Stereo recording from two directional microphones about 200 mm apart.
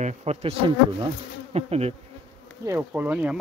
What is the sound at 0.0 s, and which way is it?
Speech, 35° right (ahead or behind).